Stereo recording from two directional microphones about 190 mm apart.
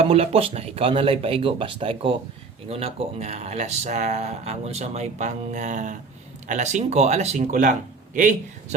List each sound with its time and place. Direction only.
0.1 s speech: 30° right (ahead or behind)